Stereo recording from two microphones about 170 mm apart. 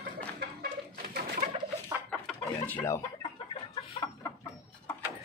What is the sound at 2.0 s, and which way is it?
Chicken, 10° left (ahead or behind).